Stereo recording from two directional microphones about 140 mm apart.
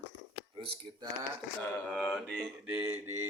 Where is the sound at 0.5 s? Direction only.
35° right (ahead or behind).